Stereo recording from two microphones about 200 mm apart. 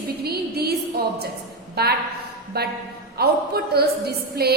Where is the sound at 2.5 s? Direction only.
50° right (ahead or behind).